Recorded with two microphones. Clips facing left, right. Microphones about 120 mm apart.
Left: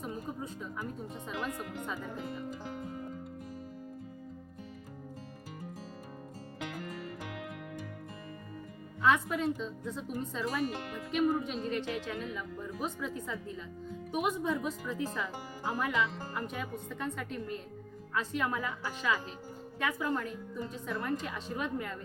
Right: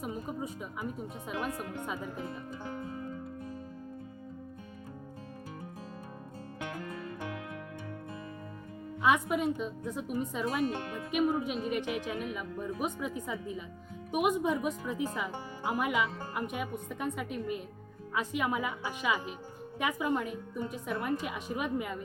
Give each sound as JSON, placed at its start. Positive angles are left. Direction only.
{"t": 0.0, "sound": "speech", "side_deg": -10}
{"t": 9.0, "sound": "speech", "side_deg": -15}